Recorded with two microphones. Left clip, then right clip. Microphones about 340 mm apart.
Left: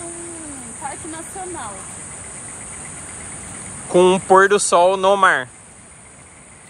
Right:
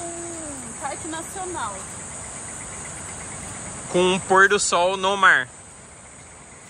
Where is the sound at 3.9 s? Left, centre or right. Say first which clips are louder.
Left 6 dB; centre.